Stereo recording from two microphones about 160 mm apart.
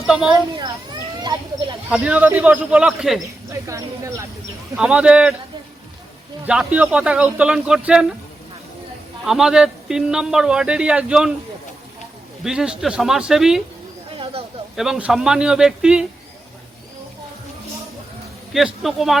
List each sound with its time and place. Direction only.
0.1 s speech: 5° right (ahead or behind)
1.9 s speech: 5° right (ahead or behind)
3.5 s speech: 20° right (ahead or behind)
4.7 s a man's voice: 5° right (ahead or behind)
6.4 s speech: 5° right (ahead or behind)
9.2 s a man's voice: 5° right (ahead or behind)
12.4 s a man's voice: 5° right (ahead or behind)
14.8 s a man's voice: 5° right (ahead or behind)
18.5 s a man's voice: centre (ahead or behind)